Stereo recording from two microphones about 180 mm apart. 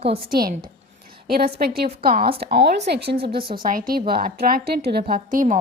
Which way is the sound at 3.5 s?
50° right (ahead or behind).